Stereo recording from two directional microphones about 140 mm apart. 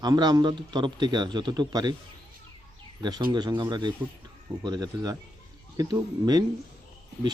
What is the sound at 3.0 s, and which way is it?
A man's voice, 30° right (ahead or behind).